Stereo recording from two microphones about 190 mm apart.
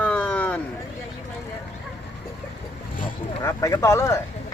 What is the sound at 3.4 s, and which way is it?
Speech, 15° left (ahead or behind).